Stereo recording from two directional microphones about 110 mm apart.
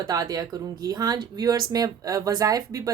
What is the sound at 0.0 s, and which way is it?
Speech, 35° right (ahead or behind).